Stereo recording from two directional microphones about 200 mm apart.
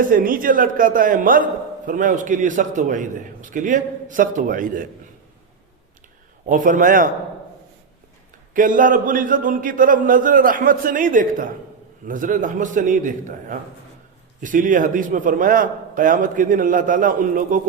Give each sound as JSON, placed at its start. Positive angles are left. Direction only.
{"t": 0.1, "sound": "a man's voice", "side_deg": -45}
{"t": 6.4, "sound": "a man's voice", "side_deg": -40}
{"t": 8.5, "sound": "a man's voice", "side_deg": -40}